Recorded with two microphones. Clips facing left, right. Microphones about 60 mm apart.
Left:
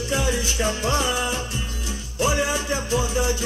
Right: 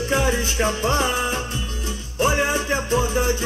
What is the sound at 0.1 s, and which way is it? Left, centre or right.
Music, right.